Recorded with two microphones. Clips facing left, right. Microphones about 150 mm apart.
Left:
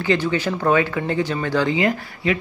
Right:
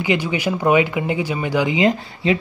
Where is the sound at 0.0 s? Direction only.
15° right (ahead or behind).